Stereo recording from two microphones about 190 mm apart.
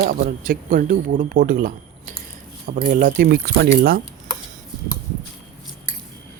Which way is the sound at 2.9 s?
50° right (ahead or behind).